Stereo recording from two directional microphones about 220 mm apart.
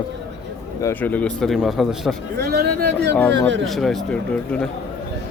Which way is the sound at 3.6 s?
Centre (ahead or behind).